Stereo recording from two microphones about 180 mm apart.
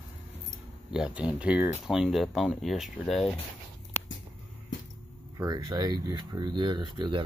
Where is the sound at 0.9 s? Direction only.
5° right (ahead or behind).